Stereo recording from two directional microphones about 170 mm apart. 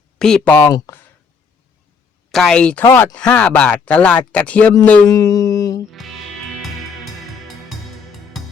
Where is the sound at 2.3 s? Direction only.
Centre (ahead or behind).